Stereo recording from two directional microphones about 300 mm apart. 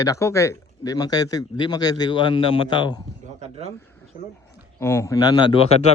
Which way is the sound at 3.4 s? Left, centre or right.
Right.